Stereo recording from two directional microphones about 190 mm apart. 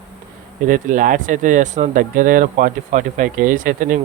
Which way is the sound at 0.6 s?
45° right (ahead or behind).